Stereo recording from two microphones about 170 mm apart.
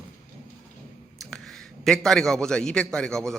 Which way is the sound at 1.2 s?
Centre (ahead or behind).